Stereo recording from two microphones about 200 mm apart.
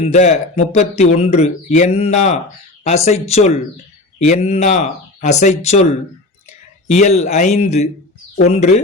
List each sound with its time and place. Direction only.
0.0 s speech: 35° left (ahead or behind)